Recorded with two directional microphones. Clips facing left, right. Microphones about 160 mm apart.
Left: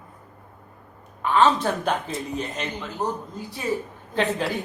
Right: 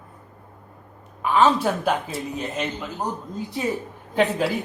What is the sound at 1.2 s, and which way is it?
Speech, 10° right (ahead or behind).